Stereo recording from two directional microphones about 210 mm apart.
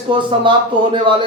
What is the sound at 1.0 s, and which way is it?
Speech, 25° right (ahead or behind).